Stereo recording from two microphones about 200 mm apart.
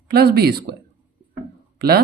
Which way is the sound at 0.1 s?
50° right (ahead or behind).